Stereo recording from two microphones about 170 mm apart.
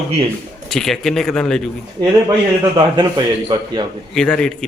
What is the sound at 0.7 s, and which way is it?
Speech, 5° left (ahead or behind).